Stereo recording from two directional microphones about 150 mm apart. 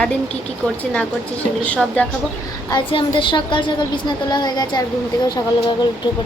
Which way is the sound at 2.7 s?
35° left (ahead or behind).